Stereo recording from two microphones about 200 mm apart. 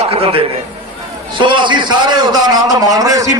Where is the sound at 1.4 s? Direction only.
25° right (ahead or behind).